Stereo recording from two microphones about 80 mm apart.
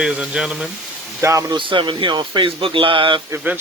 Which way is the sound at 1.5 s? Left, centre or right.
Right.